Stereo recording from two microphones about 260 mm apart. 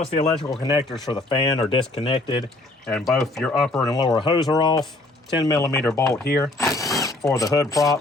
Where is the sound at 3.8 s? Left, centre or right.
Centre.